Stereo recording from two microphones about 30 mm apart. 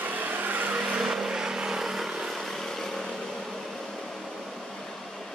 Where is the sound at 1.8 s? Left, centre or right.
Centre.